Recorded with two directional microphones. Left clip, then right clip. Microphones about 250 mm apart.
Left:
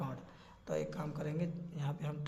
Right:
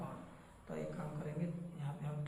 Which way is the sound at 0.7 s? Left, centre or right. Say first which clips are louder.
Left 8 dB; left.